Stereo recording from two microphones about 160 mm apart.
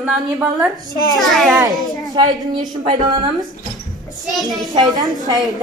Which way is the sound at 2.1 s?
25° right (ahead or behind).